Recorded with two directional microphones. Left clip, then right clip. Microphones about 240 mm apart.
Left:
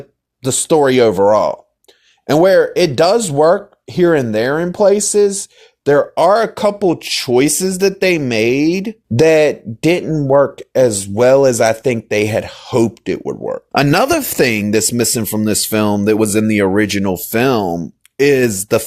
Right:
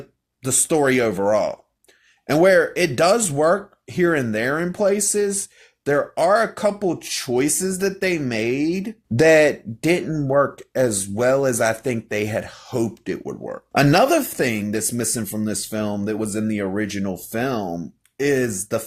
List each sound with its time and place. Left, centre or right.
0.4 s speech: left